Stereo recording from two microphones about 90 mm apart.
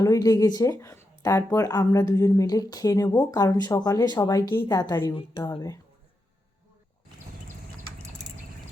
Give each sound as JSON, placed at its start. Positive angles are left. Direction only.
{"t": 0.0, "sound": "a woman's voice", "side_deg": 40}
{"t": 4.4, "sound": "a woman's voice", "side_deg": 35}